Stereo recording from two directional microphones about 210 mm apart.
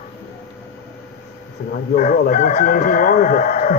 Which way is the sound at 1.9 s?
35° left (ahead or behind).